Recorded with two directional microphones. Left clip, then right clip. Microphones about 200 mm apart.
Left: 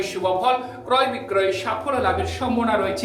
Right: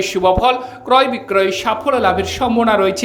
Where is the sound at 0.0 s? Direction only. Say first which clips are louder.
Right 8 dB; 40° right (ahead or behind).